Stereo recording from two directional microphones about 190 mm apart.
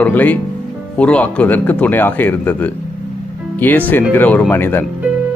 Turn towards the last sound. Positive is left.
turn(degrees=10)  # may be behind; listen again after turning